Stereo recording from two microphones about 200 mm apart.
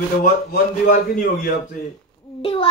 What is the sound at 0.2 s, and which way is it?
A man's voice, 40° left (ahead or behind).